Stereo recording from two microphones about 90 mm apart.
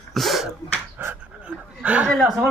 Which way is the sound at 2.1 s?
10° left (ahead or behind).